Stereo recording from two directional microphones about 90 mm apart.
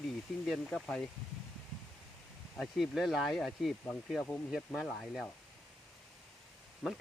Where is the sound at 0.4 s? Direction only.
Centre (ahead or behind).